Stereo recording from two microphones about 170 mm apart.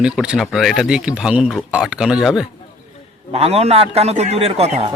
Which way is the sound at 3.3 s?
35° right (ahead or behind).